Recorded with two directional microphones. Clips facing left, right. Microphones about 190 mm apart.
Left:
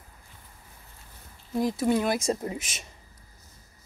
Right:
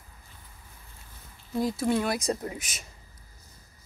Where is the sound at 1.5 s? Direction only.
20° left (ahead or behind).